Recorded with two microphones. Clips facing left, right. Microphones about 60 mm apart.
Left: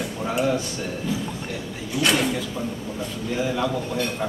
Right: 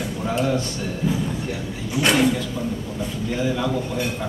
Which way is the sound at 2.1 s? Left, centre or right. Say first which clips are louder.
Right 4 dB; centre.